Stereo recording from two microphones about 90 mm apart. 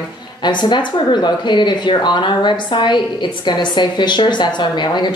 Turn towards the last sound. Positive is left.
turn(degrees=55)  # may be behind; listen again after turning